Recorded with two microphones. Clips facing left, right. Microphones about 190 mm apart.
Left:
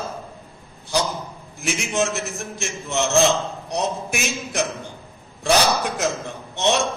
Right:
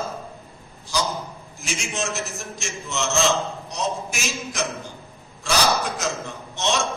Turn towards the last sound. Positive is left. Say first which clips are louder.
# left 4 dB
turn(degrees=60)  # may be behind; listen again after turning